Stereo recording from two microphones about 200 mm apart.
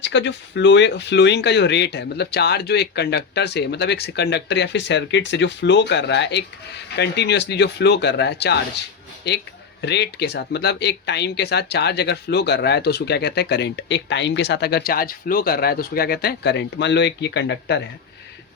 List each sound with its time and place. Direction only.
0.0 s speech: 60° left (ahead or behind)